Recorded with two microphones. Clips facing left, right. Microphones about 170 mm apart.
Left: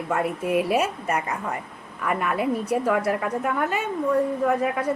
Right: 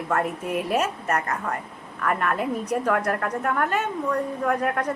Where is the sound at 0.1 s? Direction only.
5° left (ahead or behind).